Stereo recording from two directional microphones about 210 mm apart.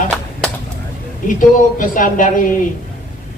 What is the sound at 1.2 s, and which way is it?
A man's voice, 40° left (ahead or behind).